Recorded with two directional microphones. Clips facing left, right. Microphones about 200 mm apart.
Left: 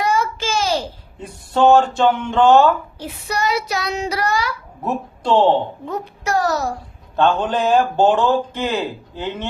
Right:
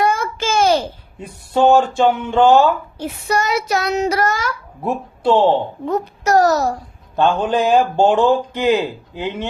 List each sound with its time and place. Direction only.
0.0 s a sound: 50° right (ahead or behind)
1.2 s speech: 10° right (ahead or behind)
3.0 s speech: 50° right (ahead or behind)
4.8 s speech: 10° right (ahead or behind)
5.9 s a child's voice: 40° right (ahead or behind)
7.2 s speech: 10° right (ahead or behind)